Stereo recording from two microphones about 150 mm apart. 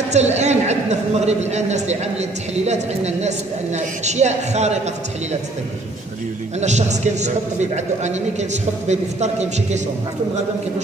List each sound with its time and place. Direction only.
0.1 s a man's voice: 50° right (ahead or behind)
6.6 s a man's voice: 50° right (ahead or behind)